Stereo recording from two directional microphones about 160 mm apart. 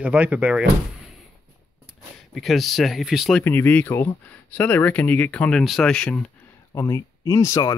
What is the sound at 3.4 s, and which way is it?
Speech, 15° left (ahead or behind).